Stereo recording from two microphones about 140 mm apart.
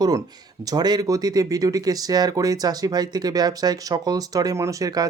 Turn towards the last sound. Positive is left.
turn(degrees=-25)  # may be behind; listen again after turning